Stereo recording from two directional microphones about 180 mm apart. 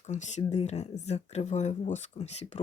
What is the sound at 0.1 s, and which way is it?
Speech, 40° left (ahead or behind).